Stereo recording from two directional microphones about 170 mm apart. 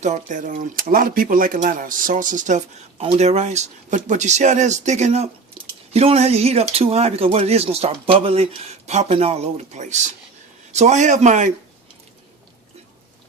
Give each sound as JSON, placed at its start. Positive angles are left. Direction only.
{"t": 0.0, "sound": "speech", "side_deg": -45}
{"t": 5.6, "sound": "a sound", "side_deg": -30}
{"t": 5.9, "sound": "speech", "side_deg": -35}